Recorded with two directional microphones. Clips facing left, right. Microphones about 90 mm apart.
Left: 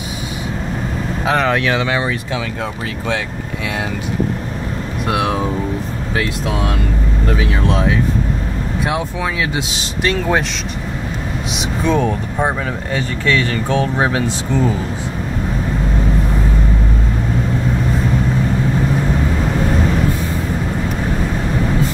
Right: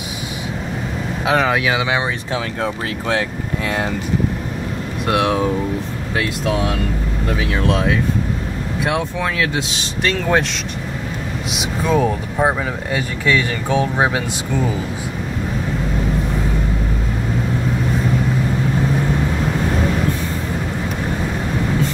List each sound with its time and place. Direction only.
1.2 s speech: 5° right (ahead or behind)
3.1 s speech: 40° right (ahead or behind)
5.0 s speech: centre (ahead or behind)
7.5 s speech: centre (ahead or behind)
11.5 s speech: 5° right (ahead or behind)